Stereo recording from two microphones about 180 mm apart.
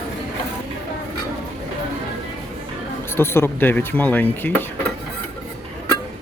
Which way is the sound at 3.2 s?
15° left (ahead or behind).